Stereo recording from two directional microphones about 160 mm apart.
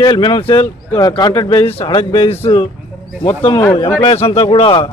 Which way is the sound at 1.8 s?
35° left (ahead or behind).